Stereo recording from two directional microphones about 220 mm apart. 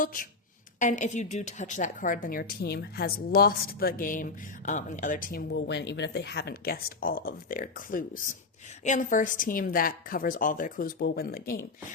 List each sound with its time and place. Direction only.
0.0 s a woman's voice: 40° left (ahead or behind)